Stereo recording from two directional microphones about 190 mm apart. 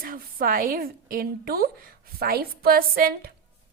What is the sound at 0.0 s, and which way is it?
A woman's voice, 50° right (ahead or behind).